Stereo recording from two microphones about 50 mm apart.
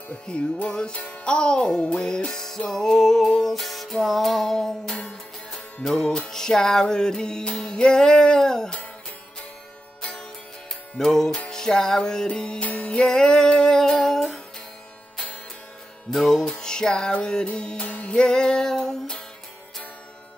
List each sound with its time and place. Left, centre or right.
0.3 s music: left
11.0 s music: centre
13.0 s music: centre
13.7 s humming: centre
16.1 s music: centre; by 17.8 s left
17.8 s music: left
18.1 s music: centre